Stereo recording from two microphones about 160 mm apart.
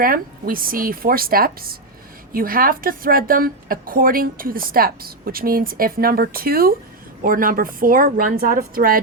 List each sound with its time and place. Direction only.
0.0 s a woman's voice: 65° right (ahead or behind)